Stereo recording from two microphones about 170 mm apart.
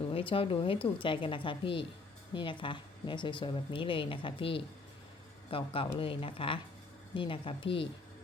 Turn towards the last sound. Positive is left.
turn(degrees=30)  # may be behind; listen again after turning